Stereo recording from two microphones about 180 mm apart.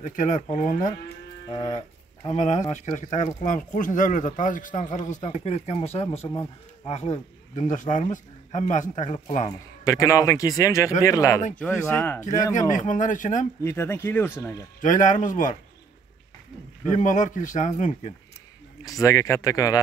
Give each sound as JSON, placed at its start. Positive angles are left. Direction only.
{"t": 0.0, "sound": "speech", "side_deg": 45}
{"t": 1.5, "sound": "livestock", "side_deg": 20}
{"t": 2.2, "sound": "speech", "side_deg": 40}
{"t": 9.8, "sound": "speech", "side_deg": 20}
{"t": 12.5, "sound": "speech", "side_deg": 45}
{"t": 13.7, "sound": "speech", "side_deg": 15}
{"t": 14.8, "sound": "speech", "side_deg": 45}
{"t": 16.9, "sound": "speech", "side_deg": 45}
{"t": 18.9, "sound": "speech", "side_deg": 20}